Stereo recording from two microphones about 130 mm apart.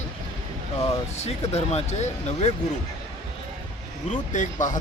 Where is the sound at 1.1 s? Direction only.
55° left (ahead or behind).